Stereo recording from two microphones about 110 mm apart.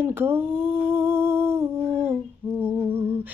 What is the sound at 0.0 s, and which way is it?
Humming, 20° right (ahead or behind).